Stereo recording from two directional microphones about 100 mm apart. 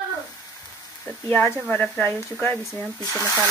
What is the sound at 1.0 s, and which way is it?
Speech, 15° left (ahead or behind).